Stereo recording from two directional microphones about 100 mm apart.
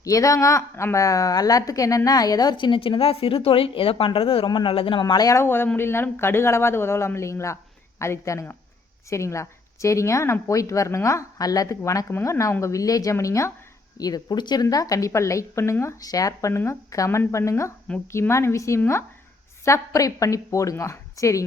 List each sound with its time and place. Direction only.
0.0 s a woman's voice: 35° left (ahead or behind); by 4.4 s 65° left (ahead or behind)
4.4 s a woman's voice: 50° left (ahead or behind)
4.9 s speech: 45° left (ahead or behind)
5.4 s speech: 25° left (ahead or behind)
14.0 s speech: 40° left (ahead or behind)